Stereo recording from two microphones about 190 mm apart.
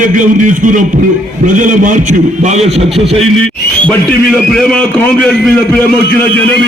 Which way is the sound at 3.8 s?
5° left (ahead or behind).